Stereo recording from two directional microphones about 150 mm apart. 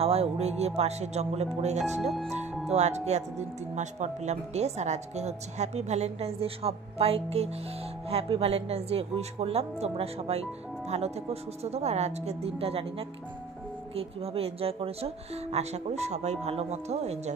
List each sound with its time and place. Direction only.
0.0 s speech: 40° right (ahead or behind)
2.0 s speech: centre (ahead or behind)
2.7 s speech: 50° right (ahead or behind)